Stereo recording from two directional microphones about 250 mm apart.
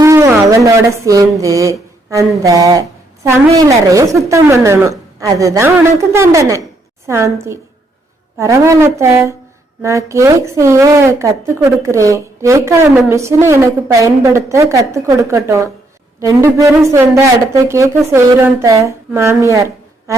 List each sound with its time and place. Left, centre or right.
0.0 s a woman's voice: centre